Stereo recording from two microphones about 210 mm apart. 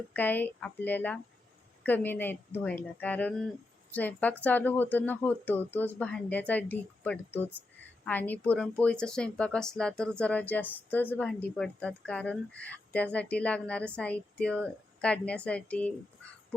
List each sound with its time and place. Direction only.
0.1 s speech: 10° left (ahead or behind)